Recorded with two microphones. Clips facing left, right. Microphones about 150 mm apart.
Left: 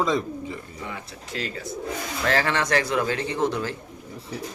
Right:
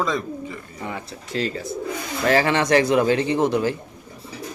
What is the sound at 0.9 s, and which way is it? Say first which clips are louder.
Speech: right 8 dB; 30° right (ahead or behind).